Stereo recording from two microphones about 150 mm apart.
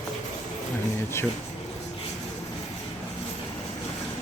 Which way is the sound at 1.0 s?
15° left (ahead or behind).